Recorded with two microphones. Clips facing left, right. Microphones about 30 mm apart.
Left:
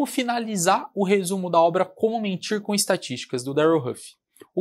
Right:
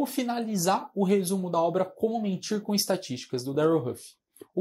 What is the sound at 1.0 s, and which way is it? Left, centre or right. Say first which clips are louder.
Speech: left 3 dB; left.